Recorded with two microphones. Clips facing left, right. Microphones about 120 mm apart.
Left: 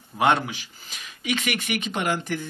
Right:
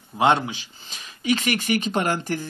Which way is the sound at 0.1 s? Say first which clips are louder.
Right 2 dB; 20° right (ahead or behind).